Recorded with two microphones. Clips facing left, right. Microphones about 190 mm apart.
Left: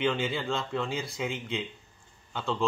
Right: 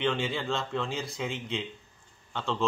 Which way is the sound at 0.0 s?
Centre (ahead or behind).